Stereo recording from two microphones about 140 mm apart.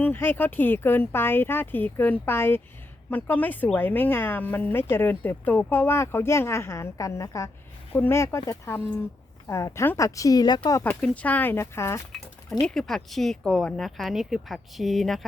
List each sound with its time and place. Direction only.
0.0 s speech: 15° left (ahead or behind)
10.8 s speech: 10° left (ahead or behind)
12.6 s speech: 5° left (ahead or behind)